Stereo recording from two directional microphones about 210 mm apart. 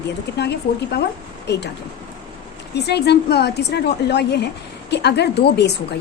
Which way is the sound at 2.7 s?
50° left (ahead or behind).